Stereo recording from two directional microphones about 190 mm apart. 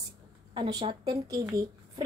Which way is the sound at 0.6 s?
25° right (ahead or behind).